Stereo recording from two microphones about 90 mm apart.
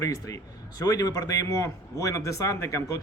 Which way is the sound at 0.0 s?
40° left (ahead or behind).